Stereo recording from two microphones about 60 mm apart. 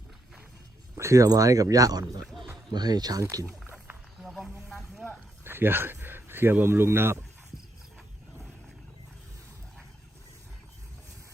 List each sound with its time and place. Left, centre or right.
0.9 s speech: right
1.7 s speech: right
2.2 s a sound: centre
2.9 s speech: right
4.2 s snake: centre
5.0 s a sound: right